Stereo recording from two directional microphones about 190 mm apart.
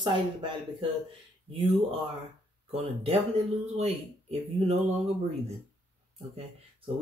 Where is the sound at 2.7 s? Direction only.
35° right (ahead or behind).